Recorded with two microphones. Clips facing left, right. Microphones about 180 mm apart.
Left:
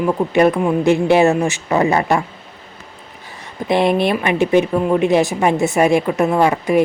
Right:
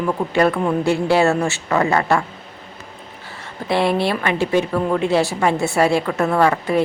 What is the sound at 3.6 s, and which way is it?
A woman's voice, 20° left (ahead or behind).